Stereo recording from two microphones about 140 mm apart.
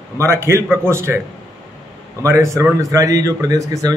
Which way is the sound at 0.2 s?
20° right (ahead or behind).